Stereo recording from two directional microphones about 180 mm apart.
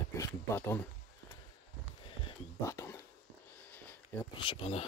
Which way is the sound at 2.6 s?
15° left (ahead or behind).